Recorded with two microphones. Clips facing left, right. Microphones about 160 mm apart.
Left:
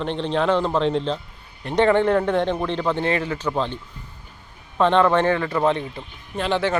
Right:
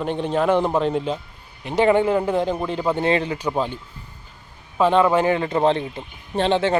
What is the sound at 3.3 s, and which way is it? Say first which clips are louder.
Speech: right 1 dB; 10° right (ahead or behind).